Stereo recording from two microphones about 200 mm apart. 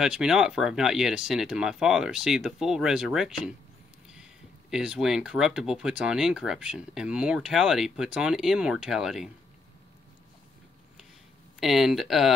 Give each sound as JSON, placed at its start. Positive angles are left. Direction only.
{"t": 0.0, "sound": "speech", "side_deg": 0}
{"t": 11.6, "sound": "speech", "side_deg": 0}